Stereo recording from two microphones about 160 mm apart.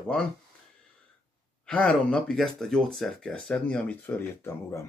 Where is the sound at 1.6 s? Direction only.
5° left (ahead or behind).